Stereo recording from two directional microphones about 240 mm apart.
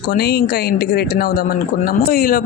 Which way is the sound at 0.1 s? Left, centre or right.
Left.